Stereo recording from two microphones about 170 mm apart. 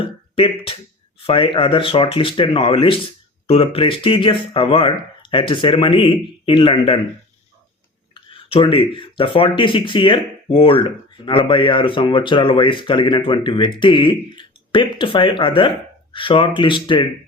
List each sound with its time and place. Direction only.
0.3 s speech: 35° left (ahead or behind)
8.1 s speech: 30° left (ahead or behind)